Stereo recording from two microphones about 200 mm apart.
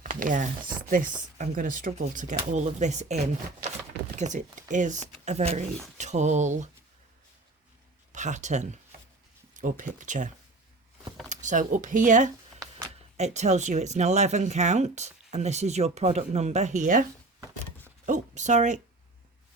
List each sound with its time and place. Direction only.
0.0 s a sound: 40° right (ahead or behind)
0.8 s speech: 40° right (ahead or behind)
4.2 s speech: 35° right (ahead or behind)
8.1 s speech: 35° right (ahead or behind)